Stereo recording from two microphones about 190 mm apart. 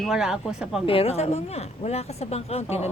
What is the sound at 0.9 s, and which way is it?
Speech, 30° left (ahead or behind).